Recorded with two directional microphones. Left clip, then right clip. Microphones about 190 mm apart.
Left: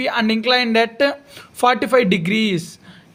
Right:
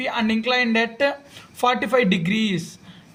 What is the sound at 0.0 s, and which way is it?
A man's voice, 40° left (ahead or behind).